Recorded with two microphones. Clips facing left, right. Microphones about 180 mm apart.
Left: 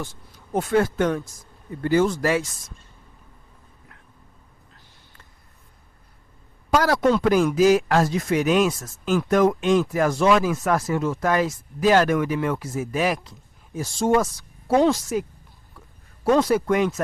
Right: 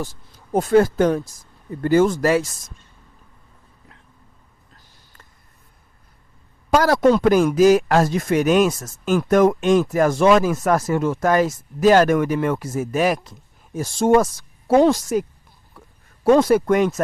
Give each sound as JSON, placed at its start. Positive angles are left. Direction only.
{"t": 0.0, "sound": "speech", "side_deg": -40}
{"t": 1.8, "sound": "speech", "side_deg": -45}
{"t": 6.7, "sound": "speech", "side_deg": -40}